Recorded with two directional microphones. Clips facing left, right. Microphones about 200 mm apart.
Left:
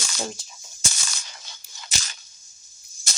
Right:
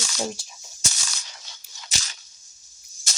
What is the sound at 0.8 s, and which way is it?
Cap gun, 55° left (ahead or behind).